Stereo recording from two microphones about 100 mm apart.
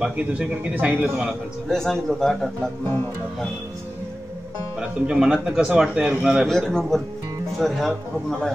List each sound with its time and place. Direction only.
0.0 s speech: 10° right (ahead or behind)
1.7 s speech: 5° left (ahead or behind)
4.7 s speech: 5° right (ahead or behind)
6.4 s speech: 5° left (ahead or behind)